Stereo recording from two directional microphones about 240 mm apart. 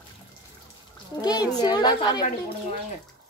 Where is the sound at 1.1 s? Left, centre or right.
Centre.